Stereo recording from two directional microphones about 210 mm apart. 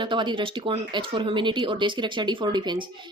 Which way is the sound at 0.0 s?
20° right (ahead or behind).